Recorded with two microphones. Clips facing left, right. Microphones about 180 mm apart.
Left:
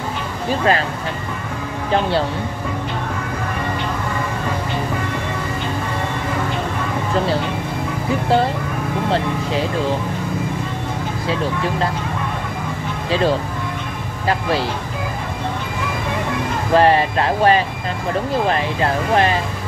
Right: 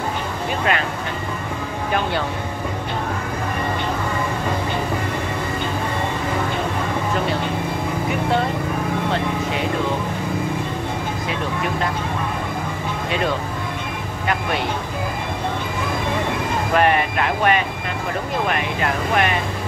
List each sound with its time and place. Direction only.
0.5 s speech: 35° left (ahead or behind)
9.1 s speech: 30° left (ahead or behind)
11.2 s speech: 30° left (ahead or behind)
13.1 s speech: 30° left (ahead or behind)
16.7 s speech: 30° left (ahead or behind)